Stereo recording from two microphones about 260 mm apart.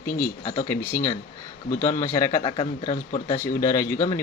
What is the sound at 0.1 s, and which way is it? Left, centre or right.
Speech, left.